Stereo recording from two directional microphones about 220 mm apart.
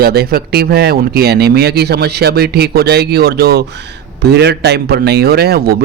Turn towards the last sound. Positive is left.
turn(degrees=-45)  # may be behind; listen again after turning